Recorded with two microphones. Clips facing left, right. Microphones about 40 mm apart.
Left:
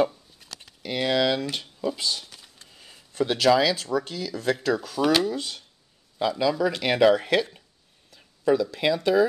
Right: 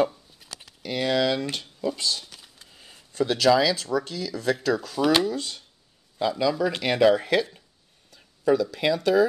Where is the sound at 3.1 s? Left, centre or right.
Centre.